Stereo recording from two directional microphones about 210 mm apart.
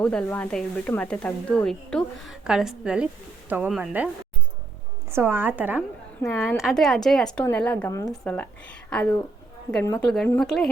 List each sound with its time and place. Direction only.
0.0 s speech: 5° left (ahead or behind)
5.1 s a woman's voice: 10° right (ahead or behind)